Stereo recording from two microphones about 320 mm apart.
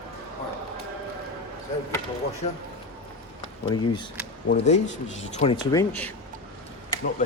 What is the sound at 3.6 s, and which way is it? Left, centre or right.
Speech, centre.